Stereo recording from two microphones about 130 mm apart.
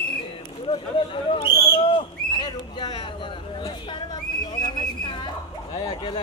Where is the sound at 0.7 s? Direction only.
40° left (ahead or behind).